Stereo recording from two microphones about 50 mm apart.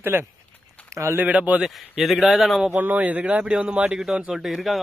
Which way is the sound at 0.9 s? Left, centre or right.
Right.